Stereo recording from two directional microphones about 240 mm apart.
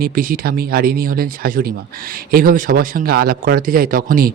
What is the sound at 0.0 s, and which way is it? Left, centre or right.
Speech, right.